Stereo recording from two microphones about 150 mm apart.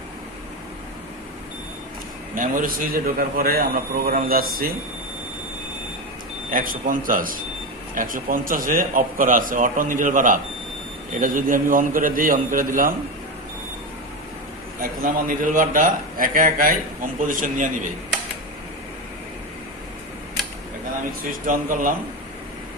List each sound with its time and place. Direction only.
2.3 s a man's voice: 65° right (ahead or behind)
6.5 s a man's voice: 65° right (ahead or behind)
14.8 s a man's voice: 65° right (ahead or behind)
21.4 s a man's voice: 60° right (ahead or behind)